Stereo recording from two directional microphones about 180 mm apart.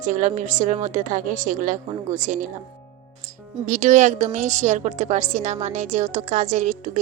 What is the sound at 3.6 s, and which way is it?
A woman's voice, 45° right (ahead or behind).